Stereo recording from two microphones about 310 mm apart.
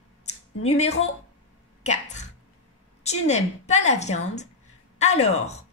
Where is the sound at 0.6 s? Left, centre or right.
Left.